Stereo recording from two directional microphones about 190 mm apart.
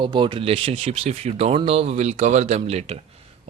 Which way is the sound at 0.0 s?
25° right (ahead or behind).